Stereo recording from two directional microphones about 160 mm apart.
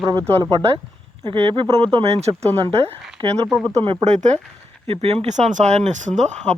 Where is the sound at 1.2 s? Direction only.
30° right (ahead or behind).